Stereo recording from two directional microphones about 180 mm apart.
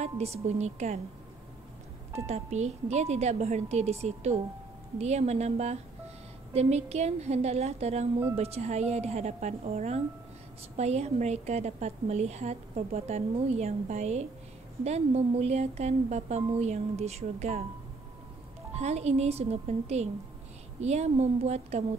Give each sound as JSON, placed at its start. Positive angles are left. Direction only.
{"t": 0.4, "sound": "a woman's voice", "side_deg": -35}
{"t": 2.2, "sound": "a woman's voice", "side_deg": -40}
{"t": 18.8, "sound": "a woman's voice", "side_deg": -35}